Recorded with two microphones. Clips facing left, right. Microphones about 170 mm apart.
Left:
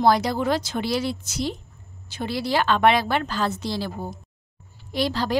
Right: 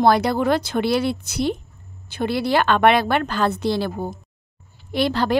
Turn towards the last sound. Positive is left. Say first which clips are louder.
# right 4 dB
turn(degrees=-60)  # may be behind; listen again after turning